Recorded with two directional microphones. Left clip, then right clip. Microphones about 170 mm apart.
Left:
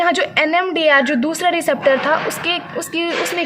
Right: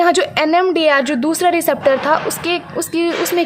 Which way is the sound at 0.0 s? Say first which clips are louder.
Right 2 dB; 45° right (ahead or behind).